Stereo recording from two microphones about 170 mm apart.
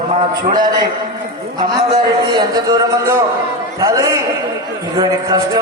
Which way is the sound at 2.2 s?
20° right (ahead or behind).